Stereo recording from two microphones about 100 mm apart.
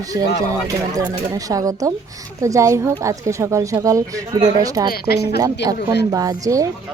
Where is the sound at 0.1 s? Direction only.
40° right (ahead or behind).